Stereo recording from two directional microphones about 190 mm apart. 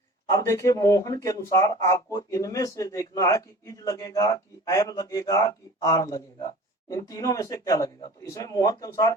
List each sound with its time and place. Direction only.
0.3 s a man's voice: 15° left (ahead or behind)